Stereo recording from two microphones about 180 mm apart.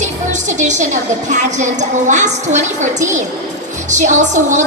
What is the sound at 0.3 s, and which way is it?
Music, 40° right (ahead or behind).